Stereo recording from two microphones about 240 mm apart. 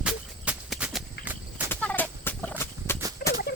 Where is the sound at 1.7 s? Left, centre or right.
Centre.